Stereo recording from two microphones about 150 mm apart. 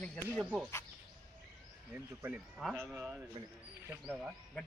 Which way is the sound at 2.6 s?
Centre (ahead or behind).